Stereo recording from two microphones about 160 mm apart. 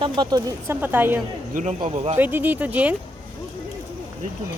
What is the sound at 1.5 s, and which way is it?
Speech, 50° right (ahead or behind).